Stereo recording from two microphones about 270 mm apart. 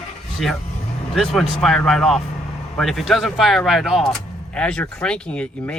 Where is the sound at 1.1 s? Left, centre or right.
Centre.